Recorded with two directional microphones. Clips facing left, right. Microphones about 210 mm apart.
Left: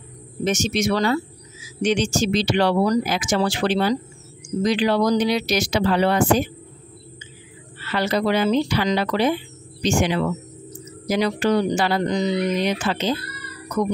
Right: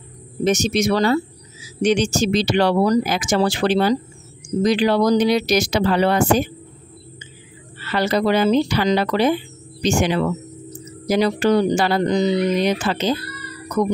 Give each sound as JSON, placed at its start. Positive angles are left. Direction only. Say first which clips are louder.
{"t": 0.4, "sound": "speech", "louder": "right 3 dB", "side_deg": -35}
{"t": 7.8, "sound": "speech", "louder": "right 2 dB", "side_deg": -40}